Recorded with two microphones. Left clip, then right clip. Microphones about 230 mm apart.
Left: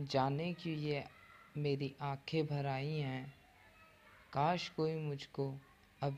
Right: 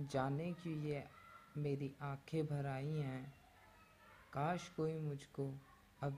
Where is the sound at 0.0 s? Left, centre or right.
Centre.